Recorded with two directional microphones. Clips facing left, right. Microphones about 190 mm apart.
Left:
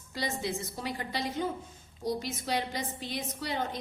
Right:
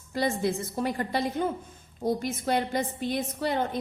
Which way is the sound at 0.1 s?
50° right (ahead or behind).